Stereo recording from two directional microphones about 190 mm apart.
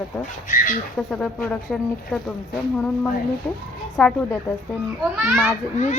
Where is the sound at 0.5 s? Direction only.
45° left (ahead or behind).